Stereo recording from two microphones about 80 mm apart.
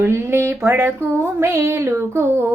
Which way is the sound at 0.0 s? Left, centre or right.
Right.